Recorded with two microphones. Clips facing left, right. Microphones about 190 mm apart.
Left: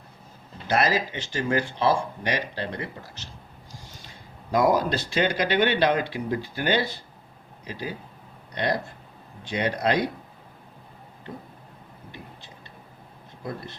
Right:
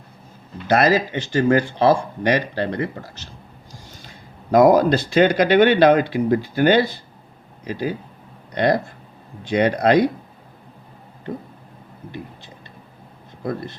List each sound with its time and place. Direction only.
0.7 s speech: 55° right (ahead or behind)
4.5 s speech: 55° right (ahead or behind)